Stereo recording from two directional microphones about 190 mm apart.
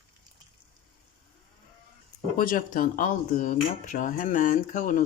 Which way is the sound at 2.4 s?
45° left (ahead or behind).